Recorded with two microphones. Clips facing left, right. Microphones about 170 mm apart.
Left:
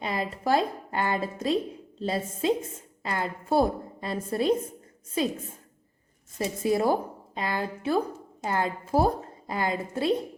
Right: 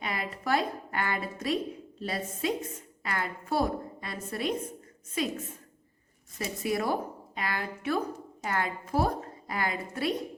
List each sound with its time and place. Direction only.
0.0 s a woman's voice: 30° left (ahead or behind)
6.4 s a woman's voice: 25° left (ahead or behind)